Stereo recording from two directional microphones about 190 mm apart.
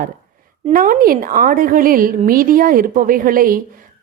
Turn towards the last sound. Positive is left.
turn(degrees=-50)  # may be behind; listen again after turning